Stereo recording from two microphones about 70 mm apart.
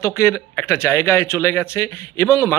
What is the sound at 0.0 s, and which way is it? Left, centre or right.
Speech, left.